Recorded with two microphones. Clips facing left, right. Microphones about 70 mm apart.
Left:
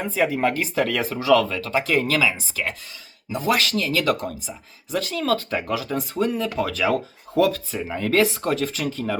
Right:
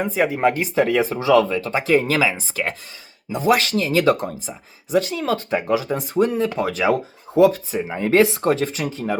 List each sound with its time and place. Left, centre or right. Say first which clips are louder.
0.1 s speech: even; centre; by 4.9 s right
4.9 s speech: right 3 dB; centre; by 8.7 s right
8.9 s speech: right 1 dB; centre